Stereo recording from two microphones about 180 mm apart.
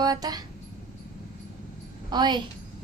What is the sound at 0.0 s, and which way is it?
Speech, 20° right (ahead or behind).